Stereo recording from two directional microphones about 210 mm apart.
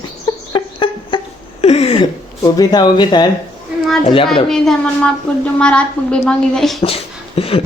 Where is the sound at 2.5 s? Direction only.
20° left (ahead or behind).